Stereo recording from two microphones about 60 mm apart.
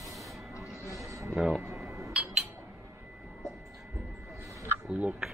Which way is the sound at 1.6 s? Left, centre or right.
Right.